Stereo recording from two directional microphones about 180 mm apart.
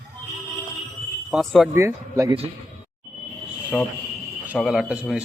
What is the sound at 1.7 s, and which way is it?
Speech, 15° right (ahead or behind).